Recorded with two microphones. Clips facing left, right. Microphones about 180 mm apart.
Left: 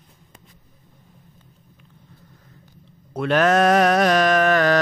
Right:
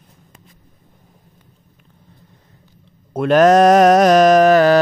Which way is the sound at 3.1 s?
45° right (ahead or behind).